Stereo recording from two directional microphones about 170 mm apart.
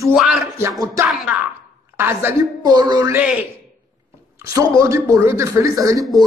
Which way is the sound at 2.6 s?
25° right (ahead or behind).